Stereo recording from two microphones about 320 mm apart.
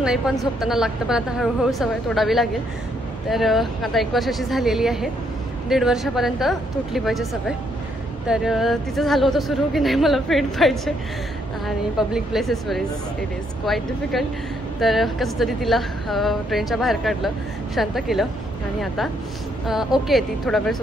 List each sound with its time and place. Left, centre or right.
0.6 s speech: centre
19.6 s speech: centre